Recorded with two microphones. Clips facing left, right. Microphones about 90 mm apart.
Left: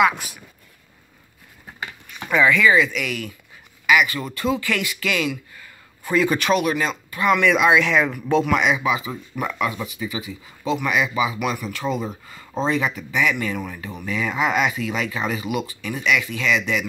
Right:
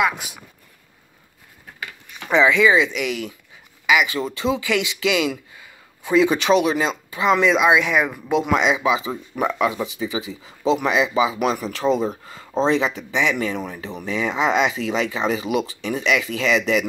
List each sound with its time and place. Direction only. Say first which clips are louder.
2.3 s speech: right 1 dB; 20° right (ahead or behind)
11.3 s speech: right 3 dB; 40° right (ahead or behind)